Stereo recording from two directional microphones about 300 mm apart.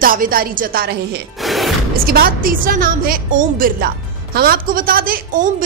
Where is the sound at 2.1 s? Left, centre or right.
Right.